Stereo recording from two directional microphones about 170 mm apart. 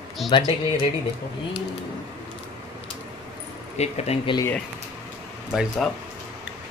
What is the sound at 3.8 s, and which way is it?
Speech, 40° left (ahead or behind).